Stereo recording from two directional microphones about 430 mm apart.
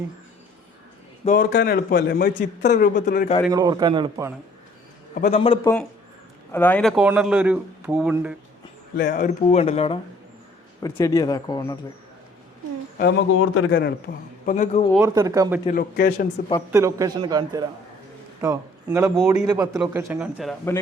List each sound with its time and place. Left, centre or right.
1.2 s a man's voice: centre
3.4 s a man's voice: centre
5.1 s a man's voice: centre
9.0 s speech: centre
13.0 s a man's voice: left
14.9 s a man's voice: centre
15.6 s a man's voice: centre
16.7 s a man's voice: centre